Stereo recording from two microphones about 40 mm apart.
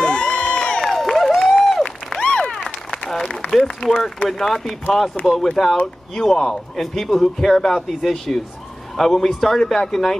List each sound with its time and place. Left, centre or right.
0.0 s crowd: left
0.7 s crowd: centre
2.4 s applause: centre
4.0 s a man's voice: centre